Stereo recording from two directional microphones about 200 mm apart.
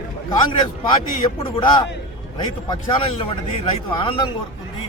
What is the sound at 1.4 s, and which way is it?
A man's voice, 25° left (ahead or behind).